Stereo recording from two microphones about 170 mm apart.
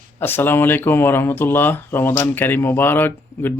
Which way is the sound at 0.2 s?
10° left (ahead or behind).